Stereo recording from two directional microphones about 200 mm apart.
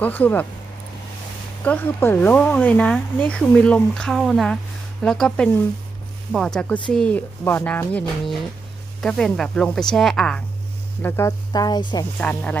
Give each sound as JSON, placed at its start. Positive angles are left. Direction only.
{"t": 0.0, "sound": "speech", "side_deg": 10}
{"t": 1.6, "sound": "speech", "side_deg": 10}
{"t": 11.0, "sound": "speech", "side_deg": 15}
{"t": 12.2, "sound": "speech", "side_deg": 10}